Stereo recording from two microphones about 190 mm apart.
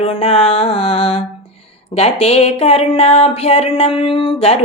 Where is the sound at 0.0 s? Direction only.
30° left (ahead or behind).